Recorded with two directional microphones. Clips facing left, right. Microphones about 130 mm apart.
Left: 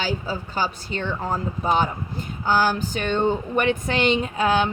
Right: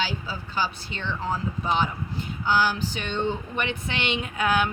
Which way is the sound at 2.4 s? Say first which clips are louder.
Left 3 dB; 45° left (ahead or behind).